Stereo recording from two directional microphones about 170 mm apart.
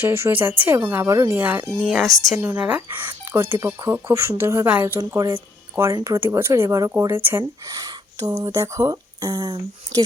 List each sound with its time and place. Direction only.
0.0 s speech: 15° right (ahead or behind)